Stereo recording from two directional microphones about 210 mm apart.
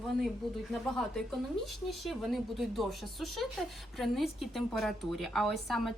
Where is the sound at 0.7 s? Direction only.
Centre (ahead or behind).